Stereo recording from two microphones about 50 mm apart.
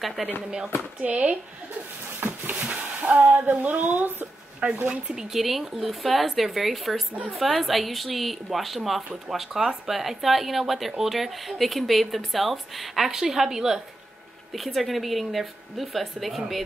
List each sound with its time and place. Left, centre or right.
0.2 s a woman's voice: centre
1.0 s speech: right
4.6 s speech: right
5.3 s a woman's voice: centre